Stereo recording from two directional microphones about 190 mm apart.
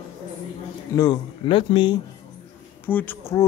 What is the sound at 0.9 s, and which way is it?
A man's voice, 20° left (ahead or behind).